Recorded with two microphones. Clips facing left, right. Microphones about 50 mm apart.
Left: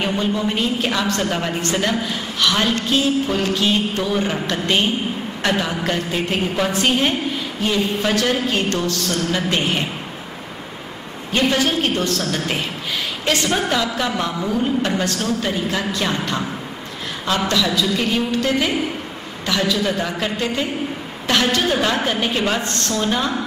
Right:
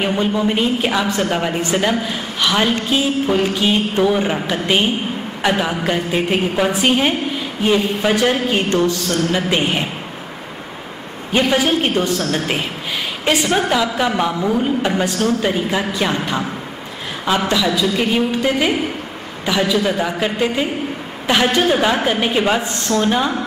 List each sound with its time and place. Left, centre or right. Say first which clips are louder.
0.0 s a woman's voice: right 3 dB; centre
11.3 s a woman's voice: right 3 dB; centre